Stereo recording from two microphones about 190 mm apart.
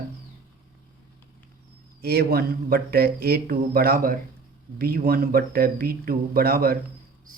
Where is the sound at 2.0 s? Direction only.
55° right (ahead or behind).